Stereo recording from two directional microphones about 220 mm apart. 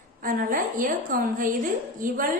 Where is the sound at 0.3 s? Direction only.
40° right (ahead or behind).